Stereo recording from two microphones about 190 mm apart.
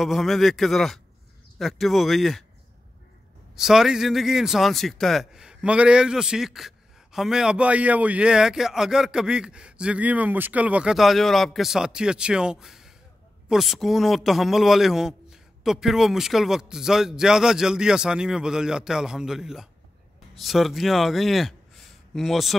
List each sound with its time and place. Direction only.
0.0 s a man's voice: centre (ahead or behind)
3.5 s a man's voice: 5° right (ahead or behind)